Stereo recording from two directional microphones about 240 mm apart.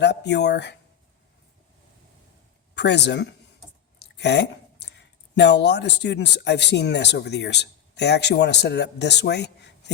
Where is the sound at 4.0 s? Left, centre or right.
Left.